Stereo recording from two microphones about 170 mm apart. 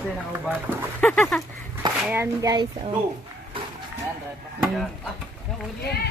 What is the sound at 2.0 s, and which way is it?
Speech, 15° right (ahead or behind).